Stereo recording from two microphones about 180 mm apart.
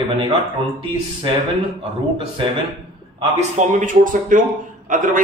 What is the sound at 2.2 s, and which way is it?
Speech, 30° right (ahead or behind).